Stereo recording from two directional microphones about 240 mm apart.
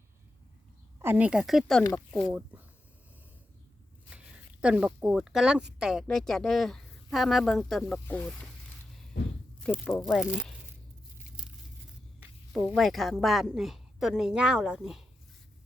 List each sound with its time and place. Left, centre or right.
1.0 s speech: centre
4.6 s speech: centre
9.6 s speech: centre
12.5 s speech: centre